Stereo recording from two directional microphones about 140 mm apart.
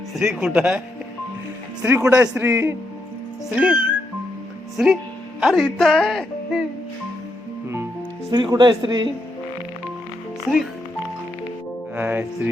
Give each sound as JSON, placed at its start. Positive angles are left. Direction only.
{"t": 0.3, "sound": "music", "side_deg": -5}
{"t": 1.8, "sound": "music", "side_deg": -15}
{"t": 2.3, "sound": "a man's voice", "side_deg": -20}
{"t": 3.5, "sound": "music", "side_deg": -10}
{"t": 5.4, "sound": "speech", "side_deg": 0}
{"t": 8.3, "sound": "speech", "side_deg": -30}
{"t": 11.9, "sound": "music", "side_deg": -10}